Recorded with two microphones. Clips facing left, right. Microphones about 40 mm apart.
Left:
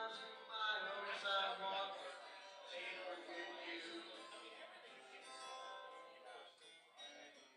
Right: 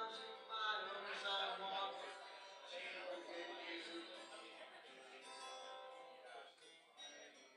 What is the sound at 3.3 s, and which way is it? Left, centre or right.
Music, centre.